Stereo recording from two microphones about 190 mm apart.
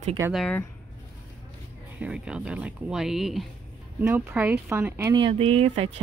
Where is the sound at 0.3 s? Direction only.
Centre (ahead or behind).